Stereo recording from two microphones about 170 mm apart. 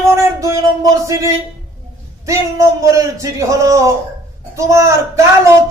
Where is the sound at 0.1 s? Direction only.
15° right (ahead or behind).